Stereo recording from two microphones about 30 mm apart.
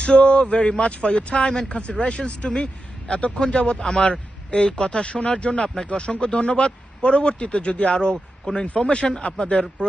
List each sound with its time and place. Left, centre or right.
0.0 s a man's voice: left